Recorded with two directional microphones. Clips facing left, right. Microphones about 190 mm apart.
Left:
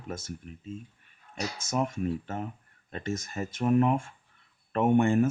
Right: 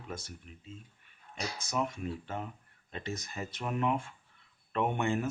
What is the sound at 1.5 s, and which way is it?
Speech, 45° left (ahead or behind).